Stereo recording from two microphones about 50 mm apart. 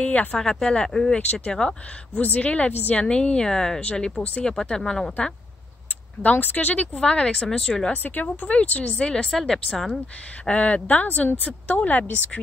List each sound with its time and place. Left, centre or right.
0.0 s speech: left
0.4 s speech: centre
2.2 s speech: left; by 5.1 s centre
6.2 s speech: left
7.0 s speech: centre
7.9 s speech: left
9.3 s speech: centre
10.4 s speech: left